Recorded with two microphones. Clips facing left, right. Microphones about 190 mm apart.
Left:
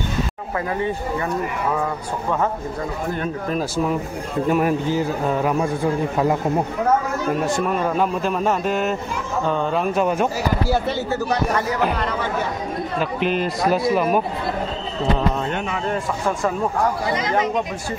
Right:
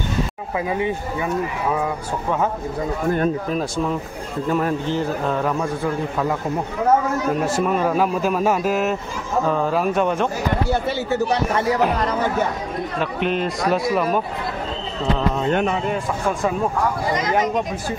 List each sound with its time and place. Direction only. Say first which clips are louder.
0.7 s speech: even; 10° right (ahead or behind)
3.4 s a man's voice: left 1 dB; 5° left (ahead or behind)
7.3 s a man's voice: right 1 dB; centre (ahead or behind)
12.0 s speech: right 3 dB; 40° right (ahead or behind)
13.0 s a man's voice: even; centre (ahead or behind)
15.9 s speech: even; 5° right (ahead or behind)